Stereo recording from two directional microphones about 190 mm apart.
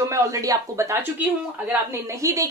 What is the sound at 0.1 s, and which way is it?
A woman's voice, 15° right (ahead or behind).